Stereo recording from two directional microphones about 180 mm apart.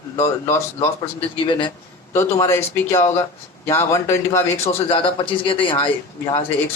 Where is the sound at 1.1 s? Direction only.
25° left (ahead or behind).